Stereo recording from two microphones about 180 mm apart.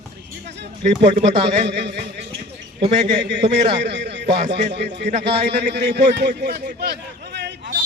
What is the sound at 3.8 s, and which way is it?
A man's voice, 70° right (ahead or behind).